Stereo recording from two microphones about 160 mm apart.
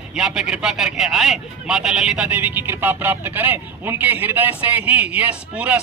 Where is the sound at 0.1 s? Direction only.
5° right (ahead or behind).